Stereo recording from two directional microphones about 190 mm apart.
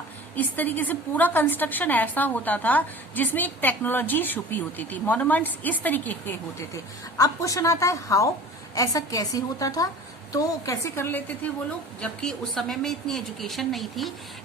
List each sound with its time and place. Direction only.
0.3 s a woman's voice: 10° left (ahead or behind)
7.2 s a woman's voice: 20° left (ahead or behind); by 14.1 s centre (ahead or behind)